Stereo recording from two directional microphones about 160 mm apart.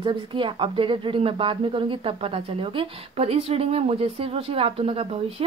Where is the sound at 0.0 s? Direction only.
30° right (ahead or behind).